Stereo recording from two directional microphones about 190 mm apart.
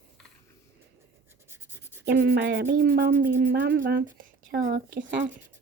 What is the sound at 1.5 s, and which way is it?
Writing, 10° right (ahead or behind).